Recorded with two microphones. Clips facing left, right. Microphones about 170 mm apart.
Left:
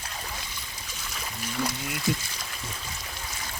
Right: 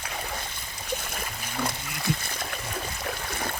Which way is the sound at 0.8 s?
55° right (ahead or behind).